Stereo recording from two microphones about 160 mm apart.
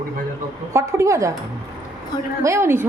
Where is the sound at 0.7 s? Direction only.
20° right (ahead or behind).